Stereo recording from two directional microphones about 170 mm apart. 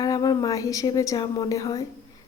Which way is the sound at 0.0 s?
20° left (ahead or behind).